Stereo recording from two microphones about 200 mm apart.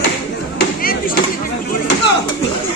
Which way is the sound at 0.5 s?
45° left (ahead or behind).